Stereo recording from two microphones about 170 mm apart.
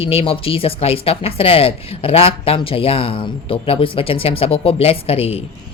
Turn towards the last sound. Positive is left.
turn(degrees=35)  # may be behind; listen again after turning